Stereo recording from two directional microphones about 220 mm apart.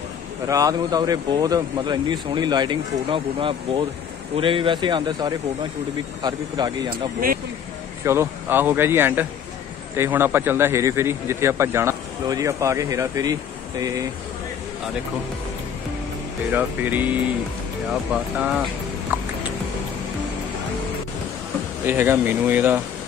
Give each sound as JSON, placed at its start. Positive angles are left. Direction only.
{"t": 0.5, "sound": "a man's voice", "side_deg": -15}
{"t": 16.5, "sound": "a man's voice", "side_deg": -10}
{"t": 19.1, "sound": "music", "side_deg": -10}
{"t": 21.8, "sound": "a man's voice", "side_deg": -10}